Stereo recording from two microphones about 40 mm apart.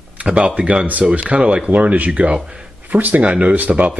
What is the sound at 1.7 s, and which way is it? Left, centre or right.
Speech, right.